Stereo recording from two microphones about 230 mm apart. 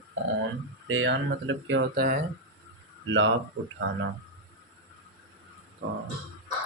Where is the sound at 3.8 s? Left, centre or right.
Right.